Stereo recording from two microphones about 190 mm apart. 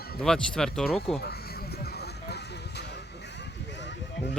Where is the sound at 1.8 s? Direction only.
60° left (ahead or behind).